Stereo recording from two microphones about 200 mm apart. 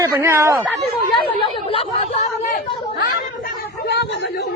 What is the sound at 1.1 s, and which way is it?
Chatter, 25° left (ahead or behind).